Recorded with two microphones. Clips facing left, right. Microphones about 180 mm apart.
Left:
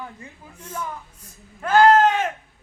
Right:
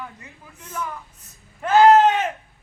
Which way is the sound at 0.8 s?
10° left (ahead or behind).